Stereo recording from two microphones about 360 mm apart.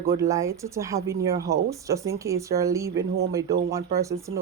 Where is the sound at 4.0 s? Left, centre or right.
Centre.